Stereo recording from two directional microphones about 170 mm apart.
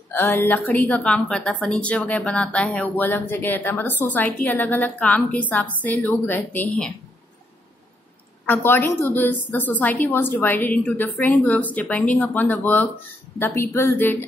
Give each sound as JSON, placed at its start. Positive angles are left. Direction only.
{"t": 0.1, "sound": "a woman's voice", "side_deg": 10}
{"t": 8.5, "sound": "a woman's voice", "side_deg": 10}